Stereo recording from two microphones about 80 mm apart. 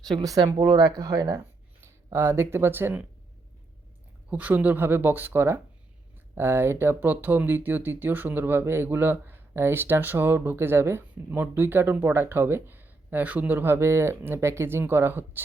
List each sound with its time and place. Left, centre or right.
0.2 s speech: right
0.4 s speech: right
2.0 s speech: right
4.3 s speech: right